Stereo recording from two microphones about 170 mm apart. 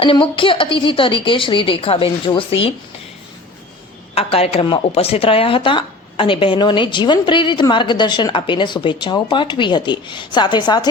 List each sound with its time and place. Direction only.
0.0 s a woman's voice: 30° left (ahead or behind)
4.1 s speech: 35° left (ahead or behind)